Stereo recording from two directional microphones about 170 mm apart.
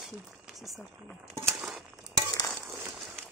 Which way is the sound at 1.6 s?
Centre (ahead or behind).